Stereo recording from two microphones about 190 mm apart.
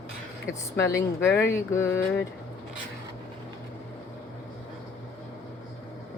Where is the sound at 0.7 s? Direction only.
15° left (ahead or behind).